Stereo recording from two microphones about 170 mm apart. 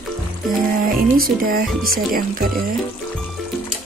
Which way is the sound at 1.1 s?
60° right (ahead or behind).